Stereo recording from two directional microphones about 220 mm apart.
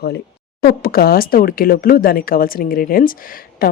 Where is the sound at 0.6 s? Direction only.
40° left (ahead or behind).